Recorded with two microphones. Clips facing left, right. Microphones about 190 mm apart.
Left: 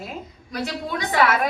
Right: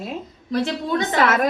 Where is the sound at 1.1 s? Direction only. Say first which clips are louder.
Even; 45° right (ahead or behind).